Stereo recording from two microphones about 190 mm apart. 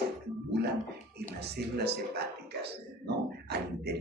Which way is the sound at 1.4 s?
60° right (ahead or behind).